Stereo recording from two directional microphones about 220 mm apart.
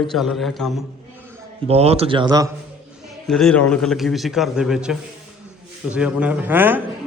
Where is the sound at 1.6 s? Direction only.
25° right (ahead or behind).